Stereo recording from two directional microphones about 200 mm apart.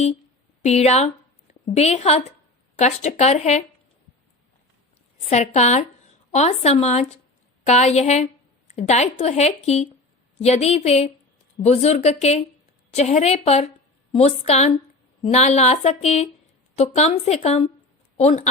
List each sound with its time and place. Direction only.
0.6 s a woman's voice: 35° left (ahead or behind)
5.3 s a woman's voice: 35° left (ahead or behind)